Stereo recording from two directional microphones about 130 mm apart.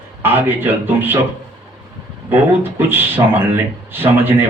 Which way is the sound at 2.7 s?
15° right (ahead or behind).